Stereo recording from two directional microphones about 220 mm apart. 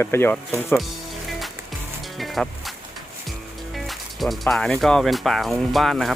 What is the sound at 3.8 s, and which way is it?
Speech, centre (ahead or behind).